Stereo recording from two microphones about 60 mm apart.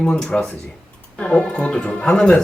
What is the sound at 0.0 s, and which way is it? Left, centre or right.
Speech, centre.